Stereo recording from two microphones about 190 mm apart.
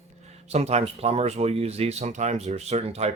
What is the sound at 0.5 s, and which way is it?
Speech, 35° right (ahead or behind).